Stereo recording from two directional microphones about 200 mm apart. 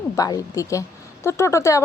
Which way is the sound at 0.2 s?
15° left (ahead or behind).